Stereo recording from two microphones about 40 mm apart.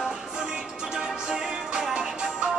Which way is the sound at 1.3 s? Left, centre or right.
Right.